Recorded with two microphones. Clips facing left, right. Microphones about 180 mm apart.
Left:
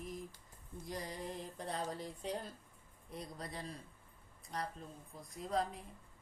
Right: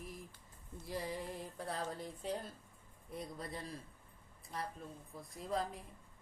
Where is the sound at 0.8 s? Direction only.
5° right (ahead or behind).